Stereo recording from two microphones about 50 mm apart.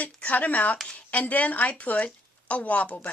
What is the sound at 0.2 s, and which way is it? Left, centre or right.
A woman's voice, left.